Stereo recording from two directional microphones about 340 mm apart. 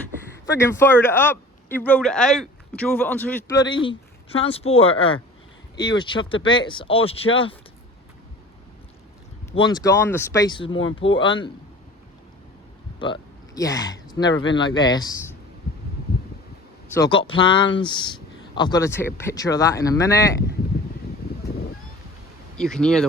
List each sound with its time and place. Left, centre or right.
0.4 s a man's voice: centre
9.5 s a man's voice: centre
13.0 s a man's voice: centre
15.7 s heart sounds: left
16.9 s a man's voice: centre
22.5 s speech: centre